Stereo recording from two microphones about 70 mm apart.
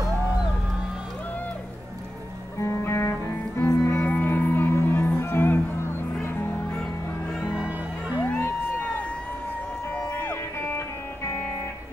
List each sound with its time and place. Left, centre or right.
2.6 s music: left
4.0 s music: left
7.5 s music: centre
8.2 s music: left